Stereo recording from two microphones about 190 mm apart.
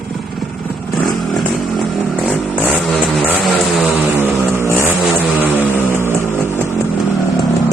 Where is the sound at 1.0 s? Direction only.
Centre (ahead or behind).